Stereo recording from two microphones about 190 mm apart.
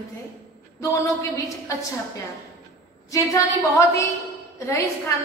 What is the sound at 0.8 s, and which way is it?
Speech, 15° left (ahead or behind).